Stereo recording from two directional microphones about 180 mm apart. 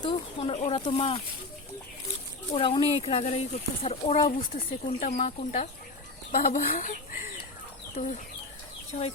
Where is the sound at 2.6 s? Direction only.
30° left (ahead or behind); by 7.4 s 50° left (ahead or behind).